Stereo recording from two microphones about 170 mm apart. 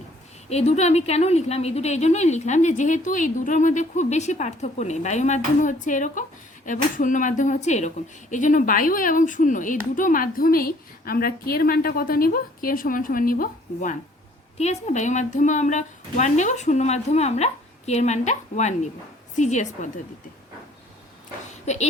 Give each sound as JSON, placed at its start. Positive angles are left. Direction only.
{"t": 0.5, "sound": "a woman's voice", "side_deg": 40}
{"t": 14.6, "sound": "a woman's voice", "side_deg": 40}